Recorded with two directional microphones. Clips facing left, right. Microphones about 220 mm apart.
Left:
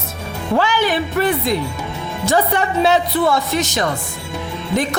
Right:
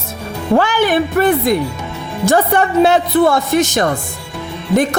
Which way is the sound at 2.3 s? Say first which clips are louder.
Right 4 dB; 50° right (ahead or behind).